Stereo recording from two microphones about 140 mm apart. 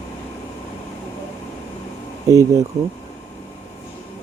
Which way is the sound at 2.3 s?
25° right (ahead or behind).